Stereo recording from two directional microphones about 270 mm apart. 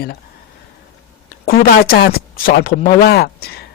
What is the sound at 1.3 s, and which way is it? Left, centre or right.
Speech, left.